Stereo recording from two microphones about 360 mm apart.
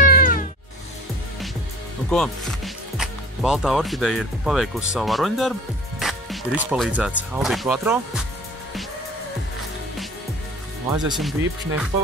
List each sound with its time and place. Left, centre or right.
0.0 s cat: left
2.0 s speech: centre
10.9 s speech: centre